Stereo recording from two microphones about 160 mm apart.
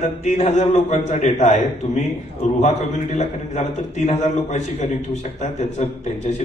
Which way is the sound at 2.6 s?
45° left (ahead or behind).